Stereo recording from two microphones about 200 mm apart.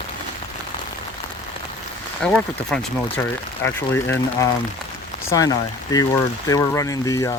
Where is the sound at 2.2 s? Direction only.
5° left (ahead or behind).